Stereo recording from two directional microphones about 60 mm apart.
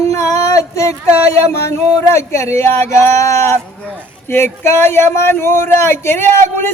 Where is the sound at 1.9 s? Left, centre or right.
Left.